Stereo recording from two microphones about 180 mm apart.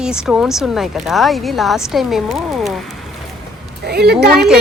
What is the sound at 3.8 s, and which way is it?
Speech, 65° right (ahead or behind).